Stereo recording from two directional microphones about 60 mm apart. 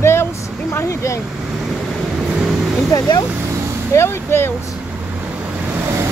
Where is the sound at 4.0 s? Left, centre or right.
Left.